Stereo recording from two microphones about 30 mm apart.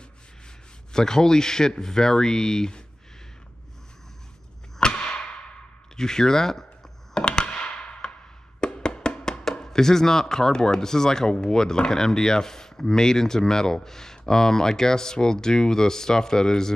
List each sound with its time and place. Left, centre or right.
0.9 s speech: centre
4.7 s a sound: left
5.9 s speech: left
7.2 s a sound: left
8.5 s music: left
9.2 s music: centre
9.6 s speech: centre